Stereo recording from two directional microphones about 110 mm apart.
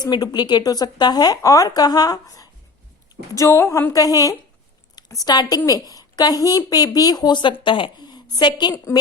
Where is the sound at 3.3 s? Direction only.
25° left (ahead or behind).